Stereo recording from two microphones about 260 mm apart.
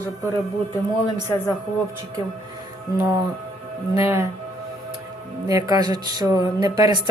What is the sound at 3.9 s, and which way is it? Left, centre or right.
Speech, centre.